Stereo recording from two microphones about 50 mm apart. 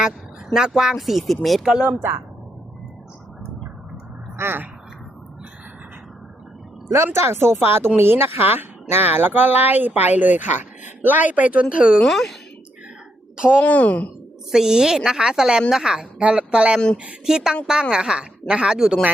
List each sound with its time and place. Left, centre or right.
0.5 s a woman's voice: centre
1.6 s a woman's voice: centre
1.9 s speech: right
4.4 s speech: right
6.9 s speech: right
12.0 s speech: centre
13.3 s speech: centre
13.6 s speech: left
14.5 s a woman's voice: centre